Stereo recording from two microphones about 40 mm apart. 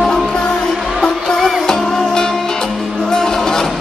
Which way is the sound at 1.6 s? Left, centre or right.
Centre.